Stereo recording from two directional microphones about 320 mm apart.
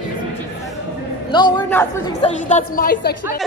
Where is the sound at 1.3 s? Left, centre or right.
Centre.